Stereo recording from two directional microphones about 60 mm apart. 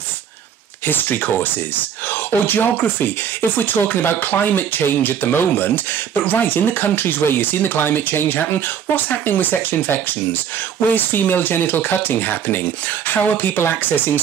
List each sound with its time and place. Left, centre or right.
0.8 s speech: left